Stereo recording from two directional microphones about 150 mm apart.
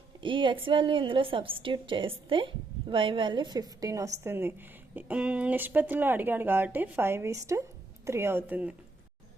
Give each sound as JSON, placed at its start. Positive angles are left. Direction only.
{"t": 0.2, "sound": "a woman's voice", "side_deg": -35}